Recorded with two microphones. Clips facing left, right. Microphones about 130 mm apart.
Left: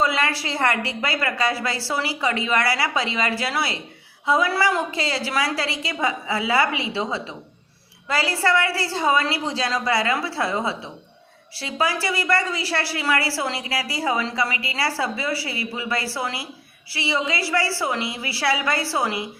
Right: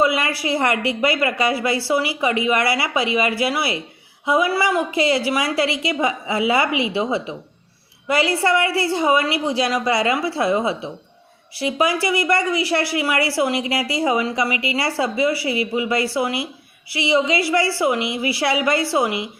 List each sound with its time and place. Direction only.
0.0 s speech: 15° right (ahead or behind)